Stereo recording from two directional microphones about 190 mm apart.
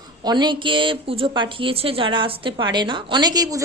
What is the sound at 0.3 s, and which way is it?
A woman's voice, 25° right (ahead or behind).